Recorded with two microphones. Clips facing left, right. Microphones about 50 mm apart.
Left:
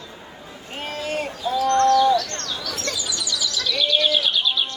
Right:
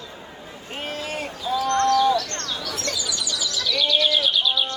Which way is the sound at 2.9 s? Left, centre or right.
Left.